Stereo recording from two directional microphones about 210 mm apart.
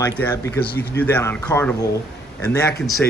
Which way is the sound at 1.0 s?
10° left (ahead or behind).